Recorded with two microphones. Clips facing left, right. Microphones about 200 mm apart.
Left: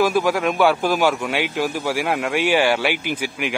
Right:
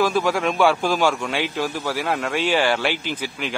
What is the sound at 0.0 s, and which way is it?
A man's voice, 5° left (ahead or behind).